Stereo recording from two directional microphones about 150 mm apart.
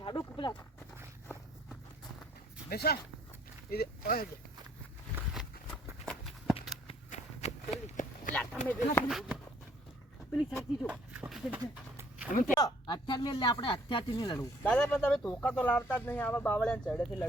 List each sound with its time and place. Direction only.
0.0 s horse: 35° left (ahead or behind)
2.6 s speech: 90° left
5.7 s walk: 5° left (ahead or behind)
6.8 s run: 45° left (ahead or behind)
8.3 s speech: 10° left (ahead or behind)
9.0 s speech: centre (ahead or behind)
10.8 s a sound: 10° right (ahead or behind)
12.5 s speech: 25° left (ahead or behind)
14.6 s speech: 5° left (ahead or behind)